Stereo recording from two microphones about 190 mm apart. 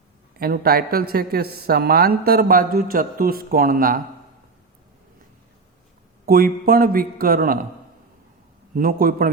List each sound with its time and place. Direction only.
0.3 s speech: 50° right (ahead or behind)
6.2 s speech: 50° right (ahead or behind)
8.7 s speech: 50° right (ahead or behind)